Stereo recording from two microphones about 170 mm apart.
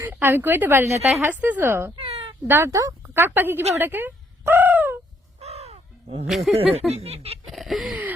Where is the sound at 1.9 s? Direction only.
35° right (ahead or behind).